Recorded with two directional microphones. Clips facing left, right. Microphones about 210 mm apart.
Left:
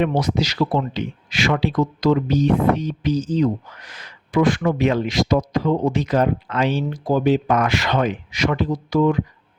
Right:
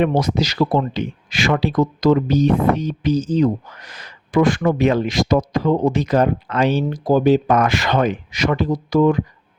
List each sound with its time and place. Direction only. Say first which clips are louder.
0.0 s speech: right 2 dB; 45° right (ahead or behind)